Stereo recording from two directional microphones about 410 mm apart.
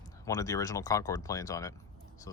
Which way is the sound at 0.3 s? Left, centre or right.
Centre.